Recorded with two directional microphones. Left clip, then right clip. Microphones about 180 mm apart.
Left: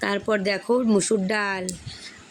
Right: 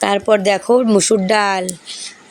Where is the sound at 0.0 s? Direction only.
15° right (ahead or behind).